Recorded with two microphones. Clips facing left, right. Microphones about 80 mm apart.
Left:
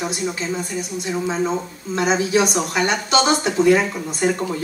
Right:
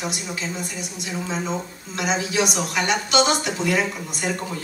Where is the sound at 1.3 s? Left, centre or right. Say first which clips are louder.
Left 4 dB; left.